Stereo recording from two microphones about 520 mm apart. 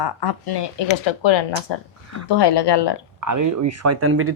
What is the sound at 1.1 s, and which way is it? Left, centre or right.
Speech, left.